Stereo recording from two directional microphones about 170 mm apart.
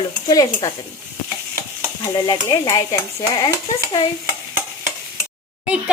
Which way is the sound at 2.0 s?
20° left (ahead or behind).